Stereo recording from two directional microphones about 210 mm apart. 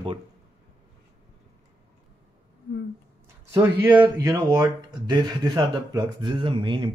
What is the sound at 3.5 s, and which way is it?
Speech, 10° right (ahead or behind).